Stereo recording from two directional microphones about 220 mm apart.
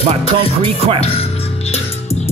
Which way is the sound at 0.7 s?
25° right (ahead or behind).